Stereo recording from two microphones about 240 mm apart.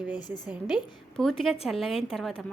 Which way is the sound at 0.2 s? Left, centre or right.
Centre.